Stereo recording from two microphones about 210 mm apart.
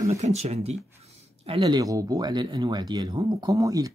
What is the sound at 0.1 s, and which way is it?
Speech, 30° right (ahead or behind).